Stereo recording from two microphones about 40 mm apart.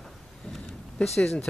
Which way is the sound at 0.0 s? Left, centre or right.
Centre.